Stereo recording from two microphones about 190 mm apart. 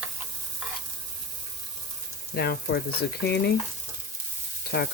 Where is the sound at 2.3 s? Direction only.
55° left (ahead or behind).